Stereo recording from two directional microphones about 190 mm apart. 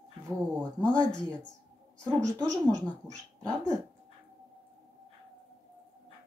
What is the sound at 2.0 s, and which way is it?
Speech, 5° left (ahead or behind).